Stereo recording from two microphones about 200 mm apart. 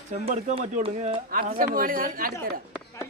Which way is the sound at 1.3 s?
45° right (ahead or behind).